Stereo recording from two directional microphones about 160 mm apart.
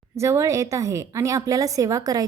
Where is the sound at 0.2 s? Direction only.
20° right (ahead or behind).